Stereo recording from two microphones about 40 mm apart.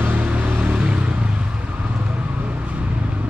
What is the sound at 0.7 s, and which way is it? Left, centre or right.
Vehicle, right.